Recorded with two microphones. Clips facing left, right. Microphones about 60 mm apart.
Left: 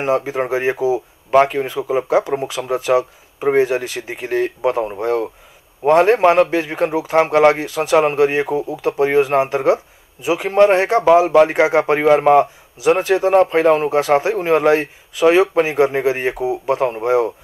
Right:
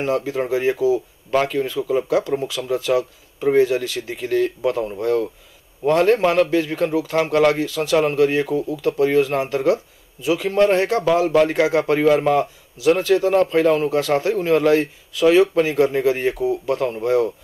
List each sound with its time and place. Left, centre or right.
0.0 s a man's voice: left
1.3 s a man's voice: left